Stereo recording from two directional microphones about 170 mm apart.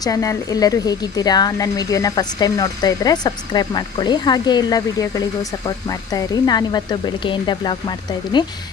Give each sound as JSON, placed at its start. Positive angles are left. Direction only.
{"t": 0.0, "sound": "speech", "side_deg": 20}